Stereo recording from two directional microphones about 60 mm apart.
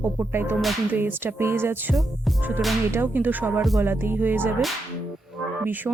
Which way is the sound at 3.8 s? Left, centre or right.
Right.